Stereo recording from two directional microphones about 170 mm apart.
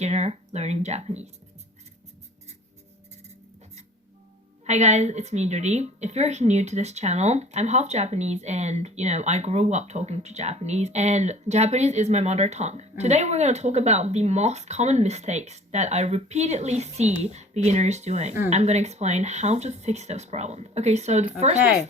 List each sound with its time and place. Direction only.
0.0 s speech: 40° right (ahead or behind)
4.6 s a woman's voice: 40° right (ahead or behind)